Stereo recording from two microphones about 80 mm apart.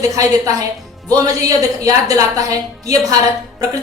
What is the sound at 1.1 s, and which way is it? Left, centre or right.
A woman's voice, right.